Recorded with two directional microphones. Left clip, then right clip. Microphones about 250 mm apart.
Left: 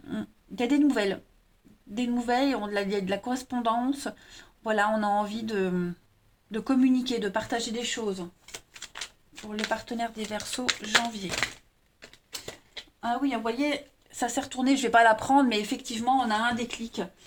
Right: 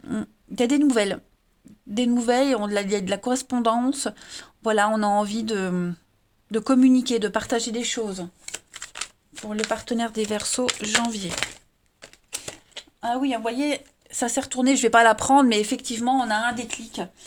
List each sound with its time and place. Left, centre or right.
0.0 s a sound: right
2.0 s speech: right
9.6 s speech: right
12.7 s speech: right